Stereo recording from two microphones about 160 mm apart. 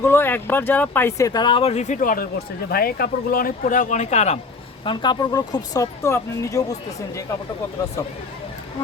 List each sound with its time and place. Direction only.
0.0 s speech: 15° left (ahead or behind)
1.3 s speech: 30° left (ahead or behind); by 2.2 s 60° left (ahead or behind)
2.6 s speech: 70° left (ahead or behind); by 4.4 s 45° left (ahead or behind)
4.9 s speech: 30° left (ahead or behind)